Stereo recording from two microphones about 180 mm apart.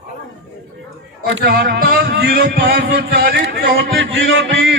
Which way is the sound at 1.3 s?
65° right (ahead or behind).